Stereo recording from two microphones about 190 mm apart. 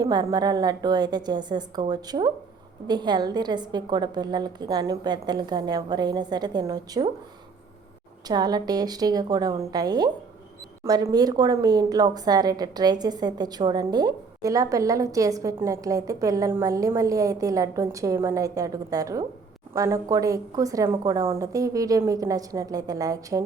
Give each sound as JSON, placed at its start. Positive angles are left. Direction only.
{"t": 0.0, "sound": "a woman's voice", "side_deg": -20}
{"t": 8.3, "sound": "a woman's voice", "side_deg": -20}